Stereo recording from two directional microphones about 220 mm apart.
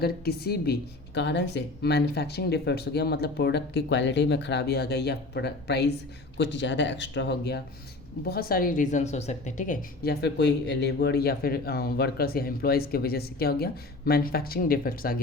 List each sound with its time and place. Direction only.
0.0 s speech: 45° left (ahead or behind)